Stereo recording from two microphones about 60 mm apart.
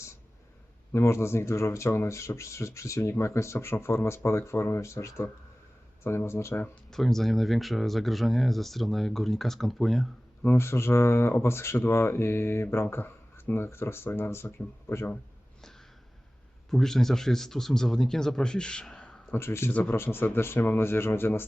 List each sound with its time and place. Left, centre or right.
0.9 s speech: left
6.9 s speech: centre
10.6 s speech: left
16.6 s speech: centre
19.3 s speech: left
19.7 s a man's voice: left
20.0 s speech: left